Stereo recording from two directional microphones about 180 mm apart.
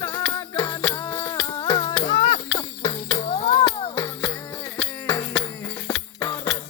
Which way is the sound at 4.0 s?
15° left (ahead or behind).